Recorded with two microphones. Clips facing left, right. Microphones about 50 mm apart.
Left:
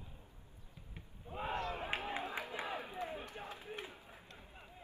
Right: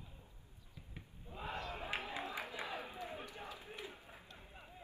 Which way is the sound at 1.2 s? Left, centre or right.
Left.